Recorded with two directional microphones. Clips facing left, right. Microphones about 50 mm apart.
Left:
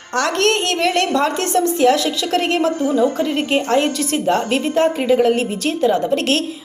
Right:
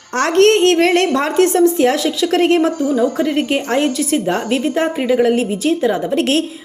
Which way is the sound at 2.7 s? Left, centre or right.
Left.